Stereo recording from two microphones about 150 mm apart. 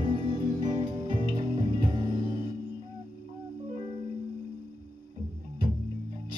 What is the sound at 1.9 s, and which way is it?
Music, 30° right (ahead or behind).